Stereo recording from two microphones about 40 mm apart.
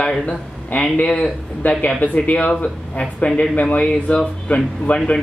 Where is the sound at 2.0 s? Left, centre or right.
Left.